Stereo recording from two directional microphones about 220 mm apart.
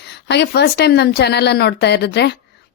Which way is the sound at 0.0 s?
50° left (ahead or behind).